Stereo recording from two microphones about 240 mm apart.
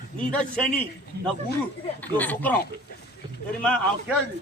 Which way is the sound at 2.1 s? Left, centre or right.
Centre.